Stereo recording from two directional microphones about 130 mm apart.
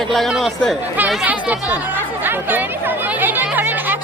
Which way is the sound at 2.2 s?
15° right (ahead or behind).